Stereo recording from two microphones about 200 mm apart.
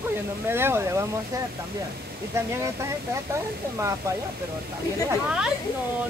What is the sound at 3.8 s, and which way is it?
Speech, 15° right (ahead or behind).